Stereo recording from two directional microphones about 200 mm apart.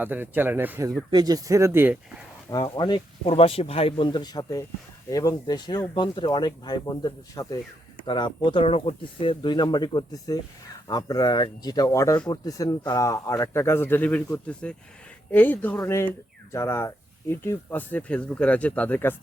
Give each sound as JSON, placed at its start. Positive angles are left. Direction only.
{"t": 0.0, "sound": "speech", "side_deg": -10}
{"t": 2.5, "sound": "speech", "side_deg": 20}